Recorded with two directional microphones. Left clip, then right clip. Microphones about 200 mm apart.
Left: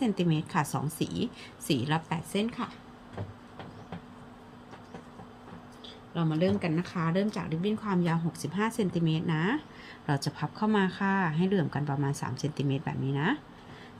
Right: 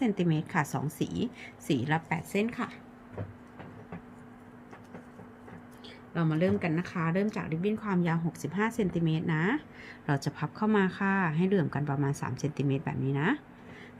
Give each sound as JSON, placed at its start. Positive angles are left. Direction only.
{"t": 0.0, "sound": "speech", "side_deg": -10}
{"t": 6.1, "sound": "speech", "side_deg": -20}